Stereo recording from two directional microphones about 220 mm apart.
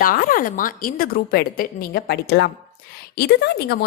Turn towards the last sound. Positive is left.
turn(degrees=50)  # may be behind; listen again after turning